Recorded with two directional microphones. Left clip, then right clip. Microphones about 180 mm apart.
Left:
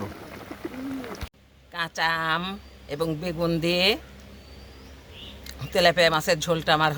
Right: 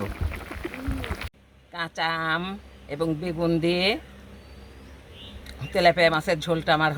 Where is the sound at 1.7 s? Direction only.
30° right (ahead or behind).